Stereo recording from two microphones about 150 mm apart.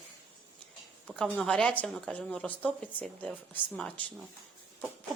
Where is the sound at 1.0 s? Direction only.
5° left (ahead or behind).